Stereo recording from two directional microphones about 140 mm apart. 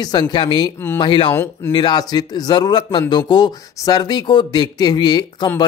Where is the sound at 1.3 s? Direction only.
15° left (ahead or behind).